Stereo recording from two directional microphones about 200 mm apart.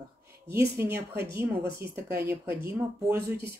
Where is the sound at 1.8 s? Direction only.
10° right (ahead or behind).